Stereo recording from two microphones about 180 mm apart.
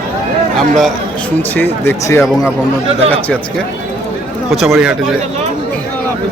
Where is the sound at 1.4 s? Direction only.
10° left (ahead or behind).